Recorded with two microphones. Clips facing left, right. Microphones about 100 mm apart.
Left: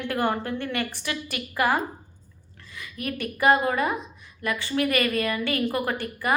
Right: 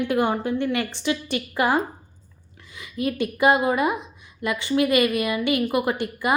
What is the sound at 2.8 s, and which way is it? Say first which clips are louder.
A woman's voice: right 6 dB; 20° right (ahead or behind).